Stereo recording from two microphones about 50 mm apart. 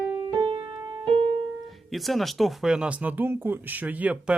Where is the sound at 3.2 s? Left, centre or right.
Right.